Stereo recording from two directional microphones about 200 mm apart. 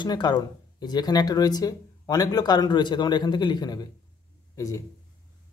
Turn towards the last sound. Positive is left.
turn(degrees=15)  # may be behind; listen again after turning